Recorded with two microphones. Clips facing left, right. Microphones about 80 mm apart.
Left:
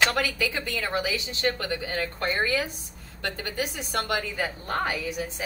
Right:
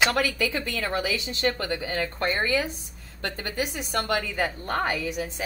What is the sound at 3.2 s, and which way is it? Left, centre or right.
A woman's voice, right.